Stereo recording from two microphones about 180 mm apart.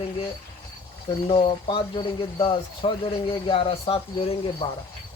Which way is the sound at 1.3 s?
30° left (ahead or behind).